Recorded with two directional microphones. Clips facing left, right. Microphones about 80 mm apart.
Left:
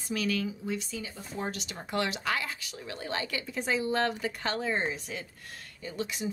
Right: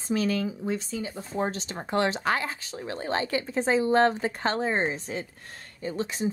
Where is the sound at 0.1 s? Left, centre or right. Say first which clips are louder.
Right 5 dB; right.